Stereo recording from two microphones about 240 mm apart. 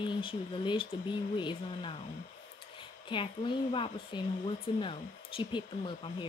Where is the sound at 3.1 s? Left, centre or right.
Left.